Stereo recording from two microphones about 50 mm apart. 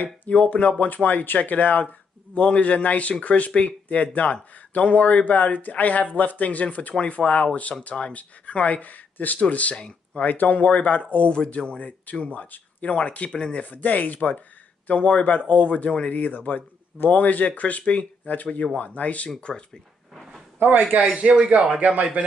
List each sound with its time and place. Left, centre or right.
0.3 s speech: left
2.3 s speech: left
10.3 s speech: left
11.3 s speech: centre
12.4 s speech: left
19.4 s speech: centre
20.5 s a man's voice: right
21.0 s speech: right